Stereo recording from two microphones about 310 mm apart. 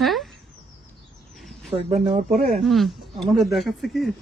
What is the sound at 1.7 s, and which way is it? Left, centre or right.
Speech, centre.